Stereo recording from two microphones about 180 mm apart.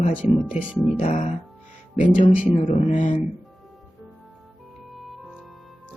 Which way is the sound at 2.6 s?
40° left (ahead or behind).